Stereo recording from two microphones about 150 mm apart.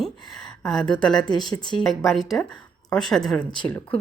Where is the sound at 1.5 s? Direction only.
30° left (ahead or behind).